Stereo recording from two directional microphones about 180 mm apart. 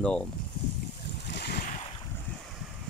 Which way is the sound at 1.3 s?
65° left (ahead or behind).